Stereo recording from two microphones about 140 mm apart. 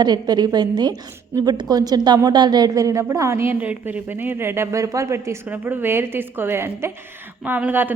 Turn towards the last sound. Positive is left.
turn(degrees=-15)  # may be behind; listen again after turning